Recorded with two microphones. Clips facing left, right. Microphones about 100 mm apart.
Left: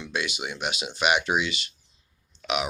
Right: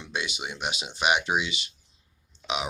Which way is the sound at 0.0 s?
20° right (ahead or behind).